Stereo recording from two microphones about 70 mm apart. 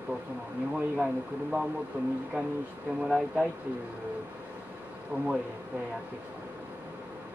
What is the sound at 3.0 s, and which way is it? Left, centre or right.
Speech, centre.